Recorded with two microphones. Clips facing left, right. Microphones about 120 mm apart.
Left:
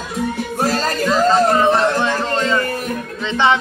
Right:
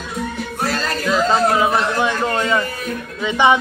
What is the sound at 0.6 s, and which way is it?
Music, 40° left (ahead or behind).